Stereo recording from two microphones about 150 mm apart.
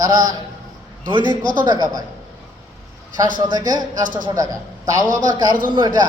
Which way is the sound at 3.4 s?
25° right (ahead or behind).